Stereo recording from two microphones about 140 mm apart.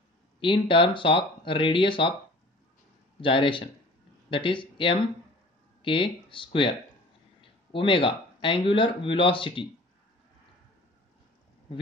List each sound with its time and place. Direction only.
0.4 s speech: 35° left (ahead or behind)
3.2 s speech: 35° left (ahead or behind)